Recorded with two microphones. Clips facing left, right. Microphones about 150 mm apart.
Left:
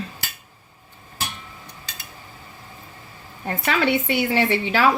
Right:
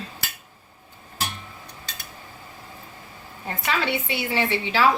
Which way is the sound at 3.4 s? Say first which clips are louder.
Left 4 dB; 55° left (ahead or behind).